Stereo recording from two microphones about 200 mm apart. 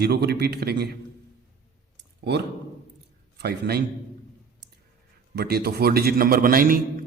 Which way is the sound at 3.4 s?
50° right (ahead or behind).